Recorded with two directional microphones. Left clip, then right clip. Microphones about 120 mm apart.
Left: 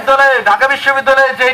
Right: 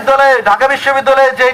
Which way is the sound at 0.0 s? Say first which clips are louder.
Right 1 dB; 25° right (ahead or behind).